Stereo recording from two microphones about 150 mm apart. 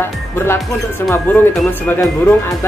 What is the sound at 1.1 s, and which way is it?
Speech, 15° left (ahead or behind).